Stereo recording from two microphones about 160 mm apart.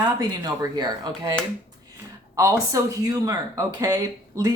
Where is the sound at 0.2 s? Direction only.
20° right (ahead or behind).